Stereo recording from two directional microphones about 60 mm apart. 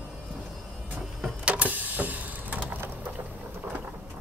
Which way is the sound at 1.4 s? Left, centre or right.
Right.